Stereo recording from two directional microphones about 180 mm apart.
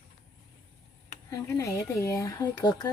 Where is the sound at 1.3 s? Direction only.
20° left (ahead or behind).